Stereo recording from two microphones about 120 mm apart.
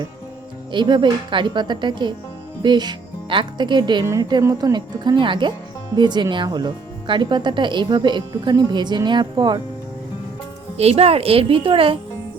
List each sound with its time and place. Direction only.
0.7 s speech: 40° right (ahead or behind)
4.0 s a woman's voice: 25° right (ahead or behind)
10.8 s speech: 55° right (ahead or behind)